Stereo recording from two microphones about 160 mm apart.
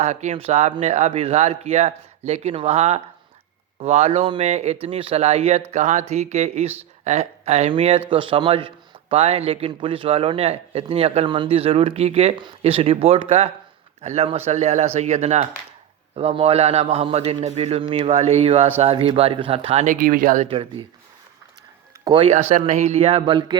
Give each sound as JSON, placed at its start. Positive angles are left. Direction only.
{"t": 0.0, "sound": "a man's voice", "side_deg": -45}
{"t": 20.5, "sound": "a man's voice", "side_deg": -35}
{"t": 22.0, "sound": "speech", "side_deg": -30}
{"t": 22.3, "sound": "a man's voice", "side_deg": -45}